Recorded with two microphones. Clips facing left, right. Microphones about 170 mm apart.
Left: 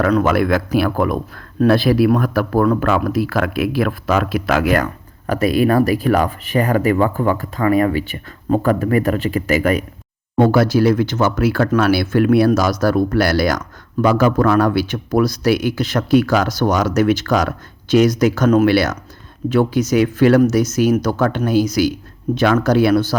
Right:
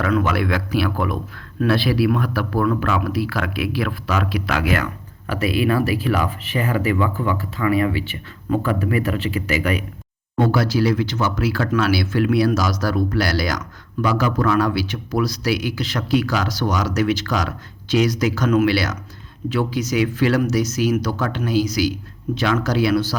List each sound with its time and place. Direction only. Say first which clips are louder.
0.0 s speech: left 5 dB; 45° left (ahead or behind)